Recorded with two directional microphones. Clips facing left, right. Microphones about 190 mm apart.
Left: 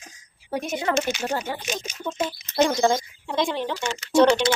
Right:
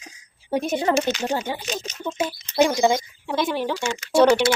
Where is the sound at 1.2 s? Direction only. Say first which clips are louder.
Right 2 dB; 20° right (ahead or behind).